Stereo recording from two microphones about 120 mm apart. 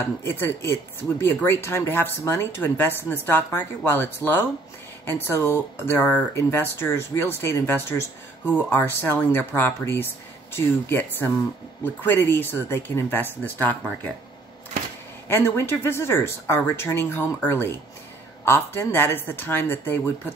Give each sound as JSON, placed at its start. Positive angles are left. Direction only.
{"t": 0.0, "sound": "speech", "side_deg": 20}
{"t": 15.2, "sound": "speech", "side_deg": 20}